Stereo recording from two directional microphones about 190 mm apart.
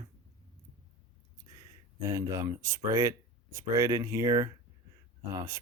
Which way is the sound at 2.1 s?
15° right (ahead or behind).